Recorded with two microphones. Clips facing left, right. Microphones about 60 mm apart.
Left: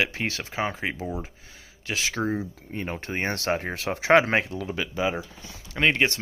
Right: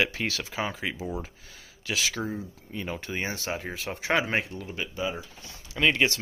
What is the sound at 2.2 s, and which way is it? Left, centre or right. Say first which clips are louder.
Speech: left 6 dB; left.